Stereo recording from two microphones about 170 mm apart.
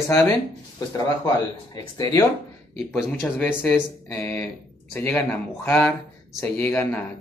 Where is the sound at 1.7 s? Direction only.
25° left (ahead or behind).